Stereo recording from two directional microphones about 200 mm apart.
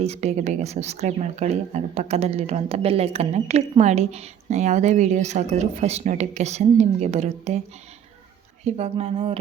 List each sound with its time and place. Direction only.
0.0 s speech: 30° right (ahead or behind)
8.6 s speech: 30° right (ahead or behind)